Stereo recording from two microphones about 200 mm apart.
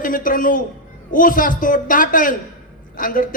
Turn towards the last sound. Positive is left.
turn(degrees=45)  # may be behind; listen again after turning